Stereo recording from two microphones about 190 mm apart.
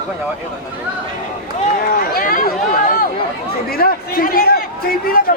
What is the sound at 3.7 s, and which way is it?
A man's voice, 50° left (ahead or behind).